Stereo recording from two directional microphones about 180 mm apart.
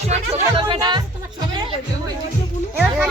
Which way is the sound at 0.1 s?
35° right (ahead or behind).